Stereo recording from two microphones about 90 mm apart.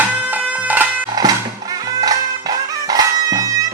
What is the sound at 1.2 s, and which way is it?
Music, 45° right (ahead or behind).